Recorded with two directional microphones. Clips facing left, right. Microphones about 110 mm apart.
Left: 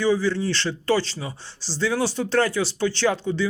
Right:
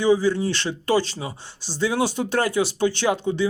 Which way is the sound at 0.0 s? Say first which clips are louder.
Right 2 dB; 15° right (ahead or behind).